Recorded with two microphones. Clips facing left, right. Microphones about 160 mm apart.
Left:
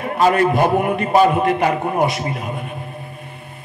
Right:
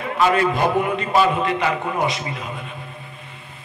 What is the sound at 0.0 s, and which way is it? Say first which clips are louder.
A man's voice: left 3 dB; 45° left (ahead or behind).